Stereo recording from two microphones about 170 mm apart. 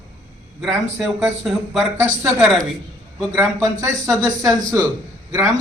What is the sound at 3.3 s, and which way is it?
Speech, 20° right (ahead or behind).